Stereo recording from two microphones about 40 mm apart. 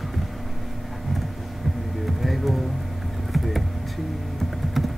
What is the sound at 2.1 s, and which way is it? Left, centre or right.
Music, centre.